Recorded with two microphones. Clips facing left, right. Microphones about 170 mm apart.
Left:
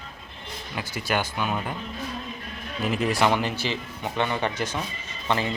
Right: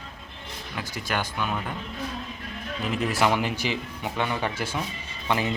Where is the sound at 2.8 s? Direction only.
5° left (ahead or behind).